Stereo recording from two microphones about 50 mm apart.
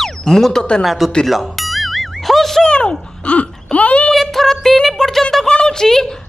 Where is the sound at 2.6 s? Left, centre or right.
Centre.